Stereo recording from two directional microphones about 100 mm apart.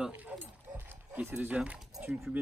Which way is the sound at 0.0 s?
15° right (ahead or behind).